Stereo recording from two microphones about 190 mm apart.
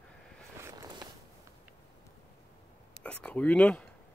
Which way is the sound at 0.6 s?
15° right (ahead or behind).